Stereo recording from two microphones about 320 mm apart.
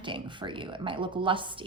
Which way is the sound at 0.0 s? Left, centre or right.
Centre.